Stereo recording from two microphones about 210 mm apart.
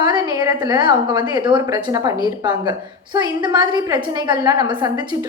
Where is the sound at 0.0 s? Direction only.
20° right (ahead or behind).